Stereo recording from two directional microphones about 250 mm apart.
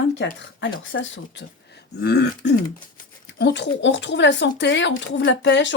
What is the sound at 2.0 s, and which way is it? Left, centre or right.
Throat clearing, left.